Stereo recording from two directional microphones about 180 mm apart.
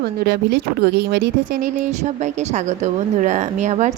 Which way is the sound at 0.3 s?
65° right (ahead or behind).